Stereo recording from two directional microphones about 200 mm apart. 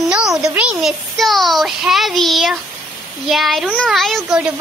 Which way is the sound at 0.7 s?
Centre (ahead or behind).